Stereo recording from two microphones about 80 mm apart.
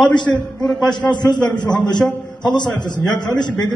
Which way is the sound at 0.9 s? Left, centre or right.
Left.